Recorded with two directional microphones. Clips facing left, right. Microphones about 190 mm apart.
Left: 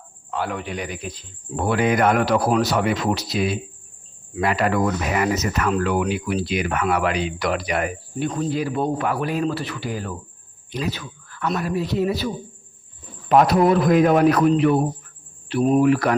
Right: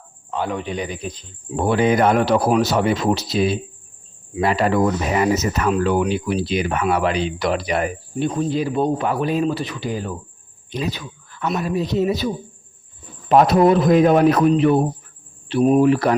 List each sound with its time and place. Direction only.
0.3 s speech: 20° right (ahead or behind)